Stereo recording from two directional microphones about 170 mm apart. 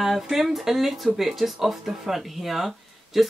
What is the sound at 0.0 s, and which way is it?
Speech, centre (ahead or behind).